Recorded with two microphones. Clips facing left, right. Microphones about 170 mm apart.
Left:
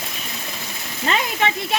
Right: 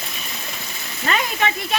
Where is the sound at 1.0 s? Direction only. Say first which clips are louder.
Left 1 dB; 25° left (ahead or behind).